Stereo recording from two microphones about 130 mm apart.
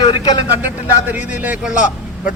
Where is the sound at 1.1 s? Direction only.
10° right (ahead or behind).